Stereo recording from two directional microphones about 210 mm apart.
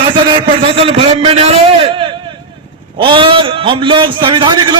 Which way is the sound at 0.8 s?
25° right (ahead or behind).